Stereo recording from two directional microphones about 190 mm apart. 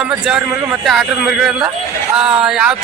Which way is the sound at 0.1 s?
5° right (ahead or behind).